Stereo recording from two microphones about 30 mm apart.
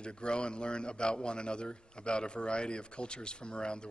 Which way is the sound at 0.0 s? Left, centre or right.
Left.